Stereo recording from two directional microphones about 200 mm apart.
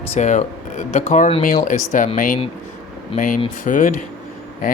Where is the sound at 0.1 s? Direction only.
35° left (ahead or behind).